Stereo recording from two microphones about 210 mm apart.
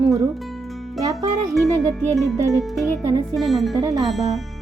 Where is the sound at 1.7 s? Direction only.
15° right (ahead or behind).